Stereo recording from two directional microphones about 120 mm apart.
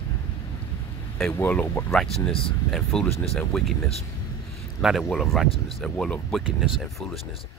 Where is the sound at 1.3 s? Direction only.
15° left (ahead or behind).